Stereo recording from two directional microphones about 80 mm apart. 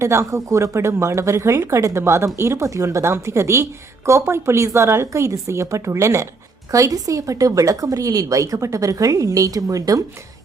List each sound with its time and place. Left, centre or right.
0.0 s speech: right